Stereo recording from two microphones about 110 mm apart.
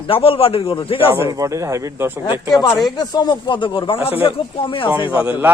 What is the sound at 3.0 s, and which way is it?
Speech, 40° left (ahead or behind).